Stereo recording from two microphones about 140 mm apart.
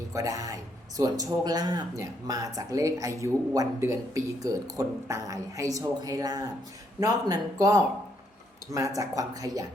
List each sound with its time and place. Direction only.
0.1 s speech: 25° right (ahead or behind)
9.0 s speech: 25° right (ahead or behind)